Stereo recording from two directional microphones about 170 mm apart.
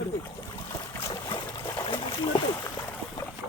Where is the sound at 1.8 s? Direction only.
30° left (ahead or behind).